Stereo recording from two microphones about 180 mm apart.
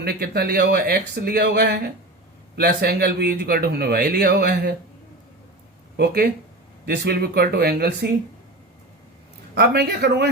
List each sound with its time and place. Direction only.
0.0 s speech: 60° right (ahead or behind)
6.8 s speech: 60° right (ahead or behind)
9.6 s speech: 65° right (ahead or behind)